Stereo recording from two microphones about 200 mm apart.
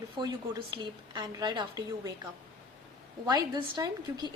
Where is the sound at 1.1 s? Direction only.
20° right (ahead or behind).